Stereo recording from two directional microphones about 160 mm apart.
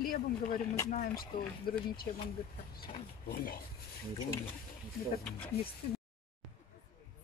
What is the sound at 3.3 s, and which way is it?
Speech, 65° left (ahead or behind).